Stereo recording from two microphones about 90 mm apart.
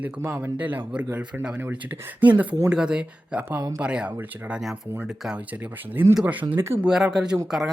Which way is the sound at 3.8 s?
10° right (ahead or behind).